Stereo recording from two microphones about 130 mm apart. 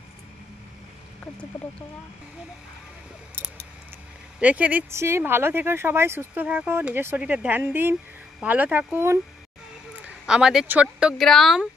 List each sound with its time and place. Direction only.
4.4 s speech: 10° right (ahead or behind)